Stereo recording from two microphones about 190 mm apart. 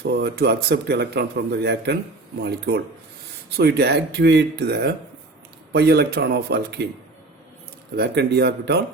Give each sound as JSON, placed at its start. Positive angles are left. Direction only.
{"t": 0.0, "sound": "speech", "side_deg": -60}
{"t": 7.9, "sound": "speech", "side_deg": -60}